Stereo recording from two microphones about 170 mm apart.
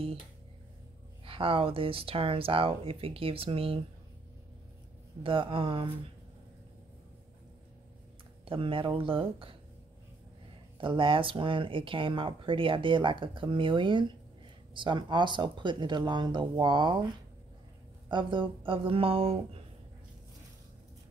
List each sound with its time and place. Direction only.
1.2 s speech: 30° right (ahead or behind)
5.2 s speech: 30° right (ahead or behind)
8.5 s speech: 30° right (ahead or behind)
10.8 s speech: 30° right (ahead or behind)
18.0 s speech: 30° right (ahead or behind)